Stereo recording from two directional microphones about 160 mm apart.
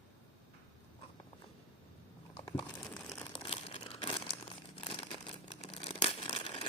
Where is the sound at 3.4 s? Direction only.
35° left (ahead or behind).